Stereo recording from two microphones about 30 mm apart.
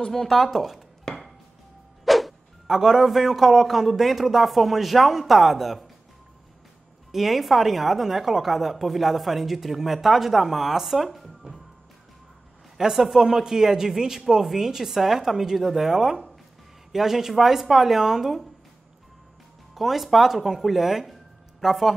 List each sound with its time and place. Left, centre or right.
0.1 s speech: centre
0.5 s speech: centre
2.0 s music: centre
2.6 s a man's voice: centre
7.1 s a woman's voice: centre
12.7 s speech: centre
15.5 s speech: centre
19.7 s speech: centre